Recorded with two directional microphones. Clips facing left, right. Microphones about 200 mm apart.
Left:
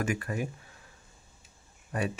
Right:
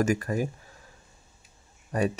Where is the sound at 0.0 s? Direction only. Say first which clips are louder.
Right 6 dB; 40° right (ahead or behind).